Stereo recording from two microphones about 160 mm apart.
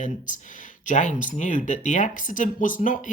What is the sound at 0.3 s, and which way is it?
Speech, 50° left (ahead or behind).